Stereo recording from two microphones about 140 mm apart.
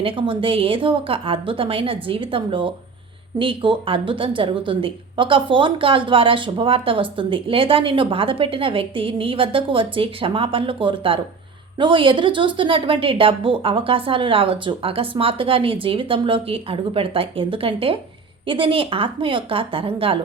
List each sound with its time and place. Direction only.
0.0 s a woman's voice: 40° right (ahead or behind)